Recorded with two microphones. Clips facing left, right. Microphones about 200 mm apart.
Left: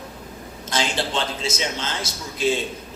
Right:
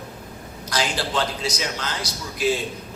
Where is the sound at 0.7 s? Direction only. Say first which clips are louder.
Left 1 dB; 25° left (ahead or behind).